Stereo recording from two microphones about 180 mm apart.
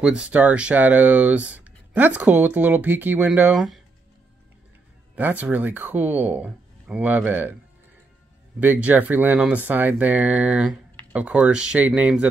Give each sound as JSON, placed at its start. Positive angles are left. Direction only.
{"t": 0.0, "sound": "speech", "side_deg": -5}
{"t": 5.1, "sound": "speech", "side_deg": -10}
{"t": 8.5, "sound": "speech", "side_deg": -10}